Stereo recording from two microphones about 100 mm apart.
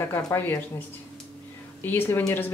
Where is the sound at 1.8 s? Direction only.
20° left (ahead or behind).